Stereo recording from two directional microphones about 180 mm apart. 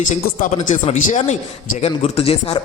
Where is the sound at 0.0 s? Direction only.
45° left (ahead or behind).